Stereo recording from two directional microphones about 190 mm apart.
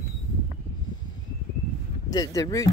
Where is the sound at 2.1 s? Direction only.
20° left (ahead or behind).